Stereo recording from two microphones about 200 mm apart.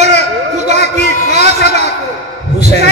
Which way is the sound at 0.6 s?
35° right (ahead or behind).